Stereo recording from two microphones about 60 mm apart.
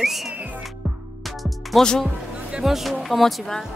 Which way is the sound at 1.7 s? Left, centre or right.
Centre.